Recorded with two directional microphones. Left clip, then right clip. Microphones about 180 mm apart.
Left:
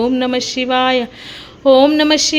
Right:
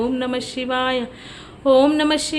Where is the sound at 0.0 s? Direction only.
25° left (ahead or behind).